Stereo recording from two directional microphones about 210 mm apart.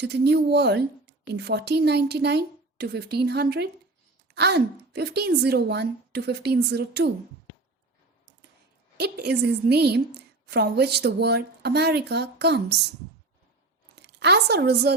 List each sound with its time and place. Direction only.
0.0 s a woman's voice: 55° right (ahead or behind)
9.0 s a woman's voice: 50° right (ahead or behind)
13.9 s a woman's voice: 55° right (ahead or behind)